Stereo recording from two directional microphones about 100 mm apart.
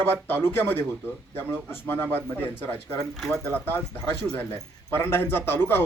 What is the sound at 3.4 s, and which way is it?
Speech, 25° left (ahead or behind).